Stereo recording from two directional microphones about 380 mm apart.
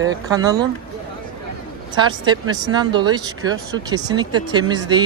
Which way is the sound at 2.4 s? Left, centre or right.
Right.